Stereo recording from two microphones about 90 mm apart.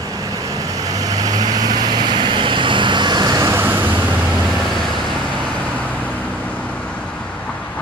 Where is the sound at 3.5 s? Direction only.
25° right (ahead or behind).